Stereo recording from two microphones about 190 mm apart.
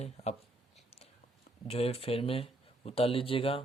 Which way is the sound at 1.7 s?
30° left (ahead or behind).